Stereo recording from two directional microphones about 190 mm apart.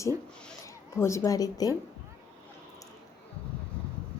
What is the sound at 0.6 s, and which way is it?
A woman's voice, 15° left (ahead or behind).